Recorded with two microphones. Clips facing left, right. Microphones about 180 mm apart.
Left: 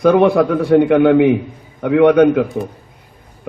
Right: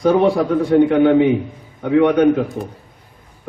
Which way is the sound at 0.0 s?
65° left (ahead or behind).